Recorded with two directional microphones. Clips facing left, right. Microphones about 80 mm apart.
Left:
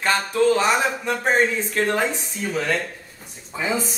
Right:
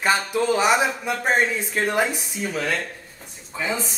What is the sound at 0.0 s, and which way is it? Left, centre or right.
Speech, centre.